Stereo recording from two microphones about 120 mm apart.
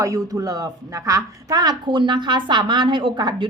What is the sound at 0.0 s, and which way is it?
A woman's voice, 30° right (ahead or behind).